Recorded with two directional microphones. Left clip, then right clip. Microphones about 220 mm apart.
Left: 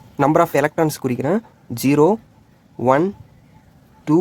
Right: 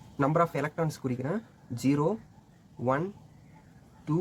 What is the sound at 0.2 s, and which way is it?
Speech, 45° left (ahead or behind).